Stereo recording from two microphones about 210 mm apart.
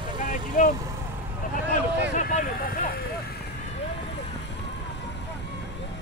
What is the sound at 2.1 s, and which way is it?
Vehicle, 35° left (ahead or behind).